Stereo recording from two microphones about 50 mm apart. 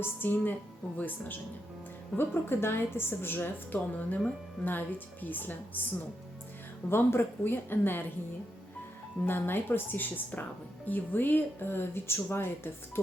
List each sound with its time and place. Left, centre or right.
0.0 s a woman's voice: left
2.1 s a woman's voice: left
6.9 s a woman's voice: left
9.2 s a woman's voice: left